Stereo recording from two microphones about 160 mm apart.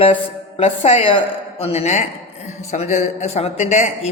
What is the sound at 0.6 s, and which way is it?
A man's voice, 40° left (ahead or behind).